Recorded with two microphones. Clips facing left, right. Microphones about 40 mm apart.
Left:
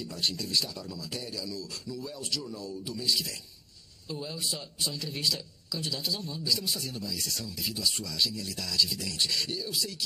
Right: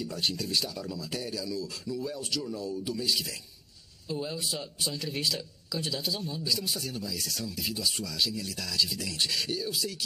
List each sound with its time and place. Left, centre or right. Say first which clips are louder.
0.0 s a man's voice: right 1 dB; right